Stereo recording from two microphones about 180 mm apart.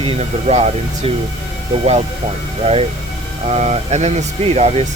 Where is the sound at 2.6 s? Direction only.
35° right (ahead or behind).